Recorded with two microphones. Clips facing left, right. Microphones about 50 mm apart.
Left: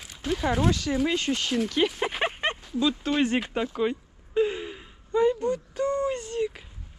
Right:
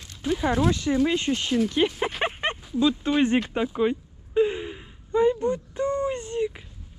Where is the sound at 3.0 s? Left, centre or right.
Right.